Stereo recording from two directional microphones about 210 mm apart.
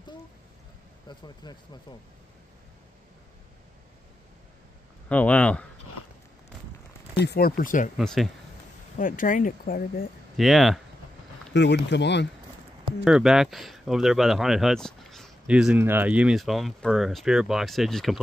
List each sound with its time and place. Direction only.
1.0 s speech: 20° left (ahead or behind)
5.1 s speech: 5° left (ahead or behind)
7.2 s speech: 50° left (ahead or behind)
8.0 s speech: centre (ahead or behind)
8.9 s speech: 40° left (ahead or behind)
10.3 s speech: centre (ahead or behind)
11.5 s speech: 55° left (ahead or behind)
13.0 s speech: 5° right (ahead or behind)